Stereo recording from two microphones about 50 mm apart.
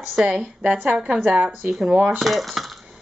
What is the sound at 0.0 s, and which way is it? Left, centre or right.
Speech, centre.